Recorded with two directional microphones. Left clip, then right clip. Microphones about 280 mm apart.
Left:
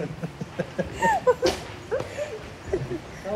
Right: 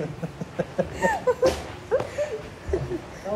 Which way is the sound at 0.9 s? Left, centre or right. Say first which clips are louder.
Left 2 dB; centre.